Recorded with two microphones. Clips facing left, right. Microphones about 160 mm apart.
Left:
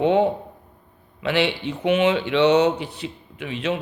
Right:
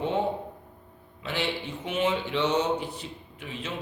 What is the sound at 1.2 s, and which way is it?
Speech, 75° left (ahead or behind).